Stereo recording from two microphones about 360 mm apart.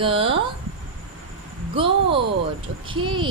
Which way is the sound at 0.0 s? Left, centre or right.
Centre.